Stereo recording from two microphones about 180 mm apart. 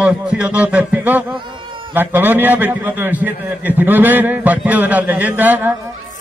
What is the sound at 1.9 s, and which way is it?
A man's voice, 10° right (ahead or behind).